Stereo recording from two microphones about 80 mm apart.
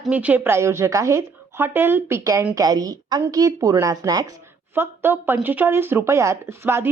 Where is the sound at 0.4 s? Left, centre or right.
Right.